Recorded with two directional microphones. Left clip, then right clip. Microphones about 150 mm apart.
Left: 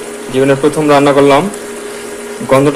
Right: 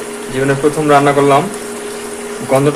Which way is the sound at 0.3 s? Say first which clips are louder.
Left 4 dB; 40° left (ahead or behind).